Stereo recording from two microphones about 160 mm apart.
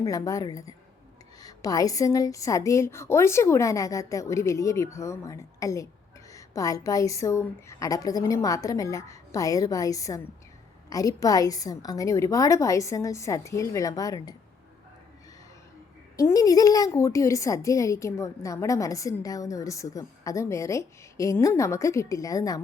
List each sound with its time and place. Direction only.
0.0 s a woman's voice: 20° left (ahead or behind)
16.1 s a woman's voice: 20° left (ahead or behind)